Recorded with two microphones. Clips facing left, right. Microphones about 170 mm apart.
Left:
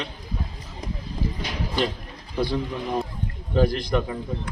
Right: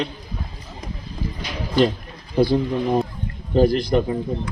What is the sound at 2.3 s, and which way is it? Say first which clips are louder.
Speech: right 7 dB; 35° right (ahead or behind).